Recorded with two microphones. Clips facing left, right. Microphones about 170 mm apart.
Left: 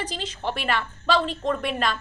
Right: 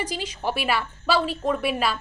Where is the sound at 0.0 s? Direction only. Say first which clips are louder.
Right 2 dB; 10° right (ahead or behind).